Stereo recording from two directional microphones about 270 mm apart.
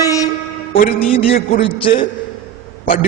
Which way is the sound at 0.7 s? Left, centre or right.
Left.